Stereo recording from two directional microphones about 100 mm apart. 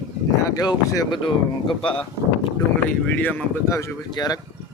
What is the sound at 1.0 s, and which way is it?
Speech, 55° left (ahead or behind).